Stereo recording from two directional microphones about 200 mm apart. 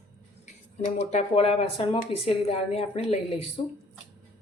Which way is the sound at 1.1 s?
30° left (ahead or behind).